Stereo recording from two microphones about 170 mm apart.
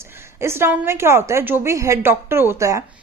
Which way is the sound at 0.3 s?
15° right (ahead or behind).